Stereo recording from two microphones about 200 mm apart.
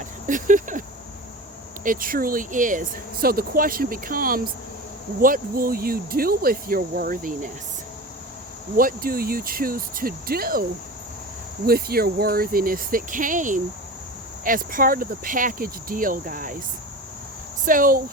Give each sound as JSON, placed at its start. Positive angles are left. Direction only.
{"t": 0.3, "sound": "speech", "side_deg": -40}
{"t": 8.7, "sound": "speech", "side_deg": -45}
{"t": 17.7, "sound": "speech", "side_deg": -45}